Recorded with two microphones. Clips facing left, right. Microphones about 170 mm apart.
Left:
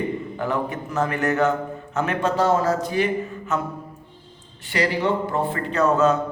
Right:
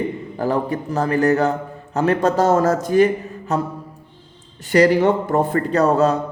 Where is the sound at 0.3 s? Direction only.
35° right (ahead or behind).